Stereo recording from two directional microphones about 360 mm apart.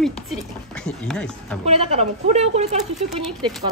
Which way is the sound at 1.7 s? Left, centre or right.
Centre.